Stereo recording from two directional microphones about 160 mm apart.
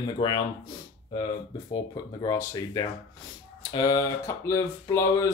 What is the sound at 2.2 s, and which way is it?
Speech, 20° left (ahead or behind).